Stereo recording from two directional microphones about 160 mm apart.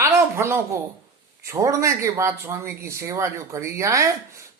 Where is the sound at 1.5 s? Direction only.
20° right (ahead or behind).